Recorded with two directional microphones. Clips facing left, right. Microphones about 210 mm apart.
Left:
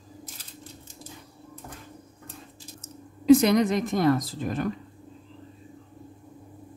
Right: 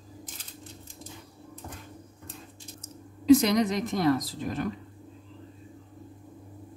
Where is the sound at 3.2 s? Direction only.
55° left (ahead or behind).